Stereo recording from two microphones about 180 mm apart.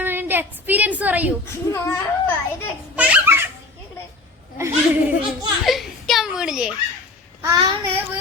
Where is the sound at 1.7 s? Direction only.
15° left (ahead or behind).